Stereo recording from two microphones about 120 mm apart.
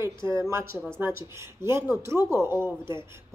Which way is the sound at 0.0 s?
25° right (ahead or behind).